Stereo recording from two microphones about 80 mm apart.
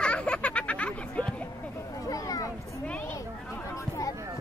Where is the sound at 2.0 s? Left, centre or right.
Left.